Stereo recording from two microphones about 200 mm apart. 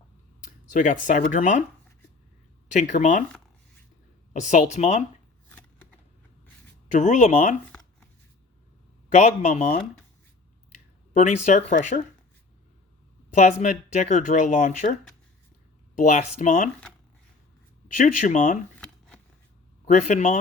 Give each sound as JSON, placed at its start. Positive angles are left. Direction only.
{"t": 0.7, "sound": "speech", "side_deg": 40}
{"t": 2.7, "sound": "speech", "side_deg": 35}
{"t": 4.4, "sound": "speech", "side_deg": 35}
{"t": 5.5, "sound": "a sound", "side_deg": 10}
{"t": 6.9, "sound": "speech", "side_deg": 35}
{"t": 9.1, "sound": "speech", "side_deg": 35}
{"t": 11.1, "sound": "speech", "side_deg": 40}
{"t": 13.3, "sound": "speech", "side_deg": 40}
{"t": 16.0, "sound": "speech", "side_deg": 40}
{"t": 17.9, "sound": "speech", "side_deg": 40}
{"t": 18.8, "sound": "a sound", "side_deg": 5}
{"t": 19.8, "sound": "a man's voice", "side_deg": 40}